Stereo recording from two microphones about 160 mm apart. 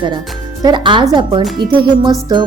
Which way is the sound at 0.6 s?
30° right (ahead or behind).